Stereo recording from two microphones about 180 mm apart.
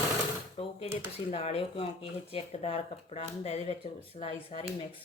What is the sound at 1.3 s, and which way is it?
Speech, 35° left (ahead or behind).